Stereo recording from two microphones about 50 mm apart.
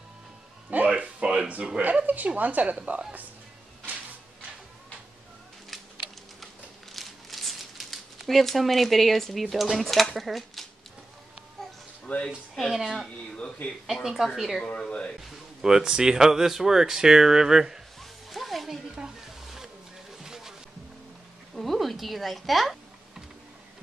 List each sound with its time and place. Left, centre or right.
0.7 s music: right
1.8 s a woman's voice: right
2.7 s speech: right
6.4 s crumpling: centre
10.1 s speech: centre
12.1 s speech: left
12.7 s a woman's voice: centre
13.4 s speech: left
14.0 s a woman's voice: centre
14.8 s speech: centre
15.1 s speech: centre
18.3 s music: centre
18.9 s a sound: centre
21.5 s typing: centre